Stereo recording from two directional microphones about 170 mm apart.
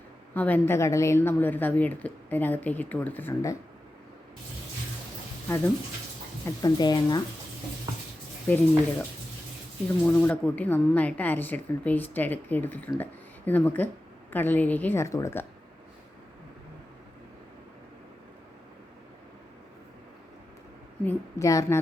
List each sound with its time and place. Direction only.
0.3 s a woman's voice: 10° left (ahead or behind)
6.4 s speech: 25° left (ahead or behind)
8.4 s a woman's voice: 10° left (ahead or behind)
10.2 s a woman's voice: 10° left (ahead or behind)
21.0 s a woman's voice: 15° left (ahead or behind)